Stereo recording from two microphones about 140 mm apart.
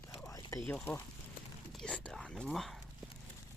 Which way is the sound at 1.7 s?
5° left (ahead or behind).